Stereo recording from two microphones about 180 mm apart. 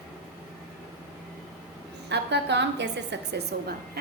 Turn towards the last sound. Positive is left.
turn(degrees=-70)  # may be behind; listen again after turning